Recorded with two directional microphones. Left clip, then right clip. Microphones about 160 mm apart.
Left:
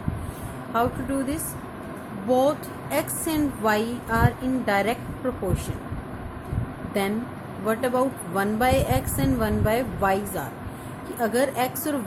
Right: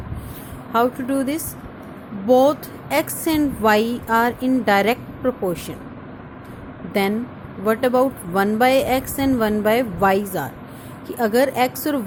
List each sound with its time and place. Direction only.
0.7 s a woman's voice: 45° right (ahead or behind)
7.6 s a woman's voice: 45° right (ahead or behind)